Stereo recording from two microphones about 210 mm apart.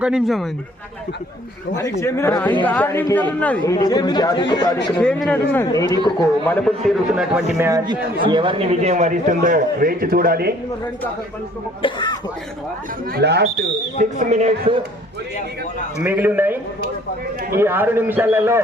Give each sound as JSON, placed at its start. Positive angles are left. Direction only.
{"t": 0.0, "sound": "a man's voice", "side_deg": 0}
{"t": 2.0, "sound": "a woman's voice", "side_deg": 15}
{"t": 3.8, "sound": "speech", "side_deg": 20}
{"t": 4.9, "sound": "a man's voice", "side_deg": 5}
{"t": 5.9, "sound": "a woman's voice", "side_deg": 20}
{"t": 6.5, "sound": "a man's voice", "side_deg": 5}
{"t": 7.6, "sound": "a man's voice", "side_deg": -20}
{"t": 11.8, "sound": "speech", "side_deg": 20}
{"t": 13.1, "sound": "speech", "side_deg": -50}
{"t": 14.0, "sound": "a man's voice", "side_deg": -35}
{"t": 16.0, "sound": "a man's voice", "side_deg": -10}
{"t": 17.6, "sound": "a man's voice", "side_deg": -10}